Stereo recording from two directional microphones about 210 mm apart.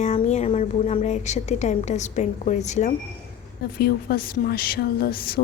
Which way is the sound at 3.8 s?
45° left (ahead or behind).